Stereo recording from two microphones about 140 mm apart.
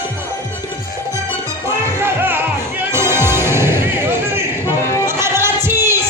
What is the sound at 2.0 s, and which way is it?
Music, 15° right (ahead or behind).